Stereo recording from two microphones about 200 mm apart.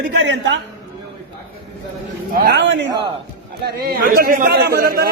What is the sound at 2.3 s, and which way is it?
A man's voice, 50° right (ahead or behind).